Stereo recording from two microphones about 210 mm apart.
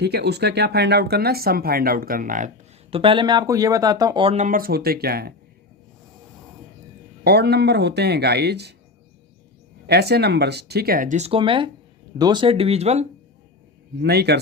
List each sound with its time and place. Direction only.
0.0 s speech: 50° right (ahead or behind)
2.9 s speech: 25° right (ahead or behind); by 5.3 s 50° right (ahead or behind)
7.3 s speech: 50° right (ahead or behind)
9.8 s speech: 50° right (ahead or behind); by 13.1 s 30° right (ahead or behind)
14.0 s speech: 50° right (ahead or behind)